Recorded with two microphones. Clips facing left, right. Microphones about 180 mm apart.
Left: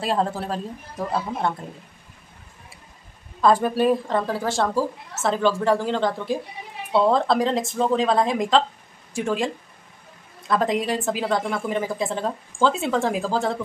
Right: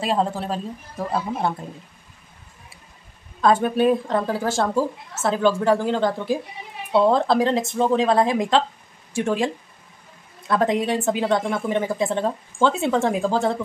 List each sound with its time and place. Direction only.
0.0 s a woman's voice: centre (ahead or behind)
3.6 s a woman's voice: centre (ahead or behind)
10.5 s a woman's voice: centre (ahead or behind)